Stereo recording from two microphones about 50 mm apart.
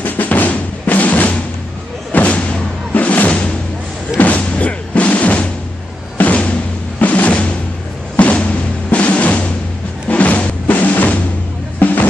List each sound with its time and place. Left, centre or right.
0.0 s music: left
8.9 s drum: left
10.0 s music: left